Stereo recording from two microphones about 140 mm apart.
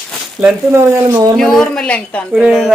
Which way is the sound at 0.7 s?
20° right (ahead or behind).